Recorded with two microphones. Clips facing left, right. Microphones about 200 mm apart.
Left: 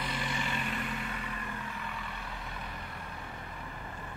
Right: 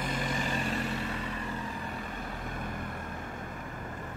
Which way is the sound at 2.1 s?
45° right (ahead or behind).